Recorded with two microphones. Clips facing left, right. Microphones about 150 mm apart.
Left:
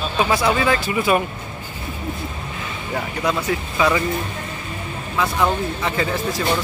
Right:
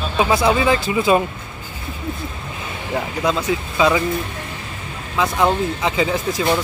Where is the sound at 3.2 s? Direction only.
20° right (ahead or behind).